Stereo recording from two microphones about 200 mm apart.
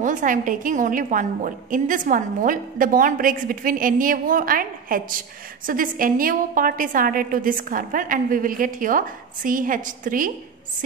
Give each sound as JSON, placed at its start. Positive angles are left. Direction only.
{"t": 0.0, "sound": "a woman's voice", "side_deg": -40}